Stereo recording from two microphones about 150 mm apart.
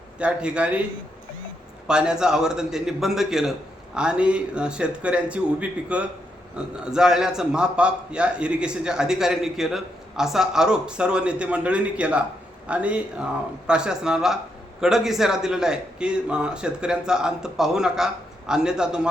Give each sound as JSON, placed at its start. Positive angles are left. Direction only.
{"t": 0.2, "sound": "a man's voice", "side_deg": -10}
{"t": 1.9, "sound": "a man's voice", "side_deg": -5}